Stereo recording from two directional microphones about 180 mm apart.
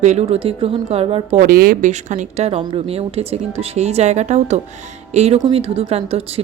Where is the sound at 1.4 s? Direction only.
55° right (ahead or behind).